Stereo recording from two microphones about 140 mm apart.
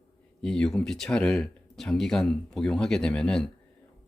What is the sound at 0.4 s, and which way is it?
Speech, 5° left (ahead or behind).